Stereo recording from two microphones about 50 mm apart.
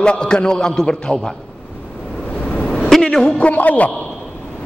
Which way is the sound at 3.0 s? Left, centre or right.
Centre.